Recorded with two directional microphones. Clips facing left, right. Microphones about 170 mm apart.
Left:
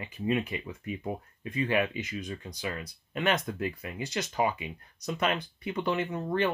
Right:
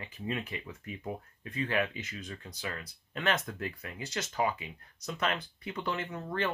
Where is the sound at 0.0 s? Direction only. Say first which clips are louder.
Left 7 dB; 15° left (ahead or behind).